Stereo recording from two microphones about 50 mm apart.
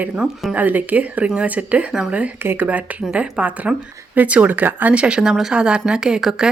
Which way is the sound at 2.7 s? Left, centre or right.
Right.